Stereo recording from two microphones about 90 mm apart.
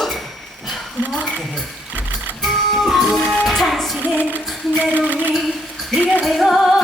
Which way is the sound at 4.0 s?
20° right (ahead or behind).